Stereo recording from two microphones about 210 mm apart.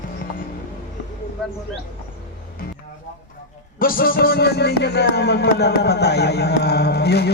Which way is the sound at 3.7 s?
45° left (ahead or behind).